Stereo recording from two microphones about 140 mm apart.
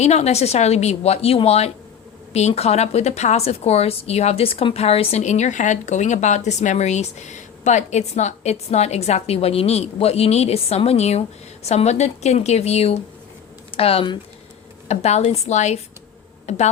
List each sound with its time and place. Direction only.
0.0 s a woman's voice: 50° left (ahead or behind)
14.8 s a woman's voice: 50° left (ahead or behind)